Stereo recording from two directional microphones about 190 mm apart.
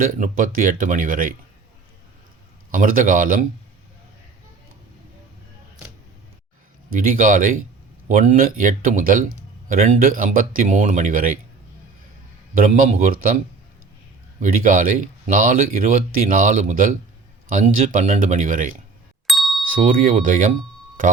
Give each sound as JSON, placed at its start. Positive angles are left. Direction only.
{"t": 0.0, "sound": "speech", "side_deg": -45}
{"t": 2.7, "sound": "speech", "side_deg": -45}
{"t": 6.9, "sound": "speech", "side_deg": -45}
{"t": 12.5, "sound": "speech", "side_deg": -45}
{"t": 14.4, "sound": "speech", "side_deg": -45}
{"t": 19.3, "sound": "ding", "side_deg": 0}
{"t": 19.6, "sound": "speech", "side_deg": -45}